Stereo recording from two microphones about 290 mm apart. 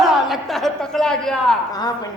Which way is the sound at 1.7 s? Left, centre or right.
Centre.